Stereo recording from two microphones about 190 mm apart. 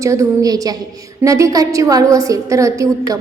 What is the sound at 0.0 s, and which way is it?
A woman's voice, 15° right (ahead or behind).